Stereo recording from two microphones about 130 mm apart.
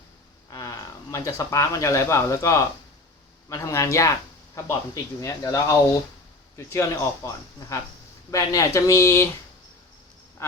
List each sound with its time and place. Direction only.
0.5 s speech: 30° left (ahead or behind)
5.2 s speech: 25° left (ahead or behind)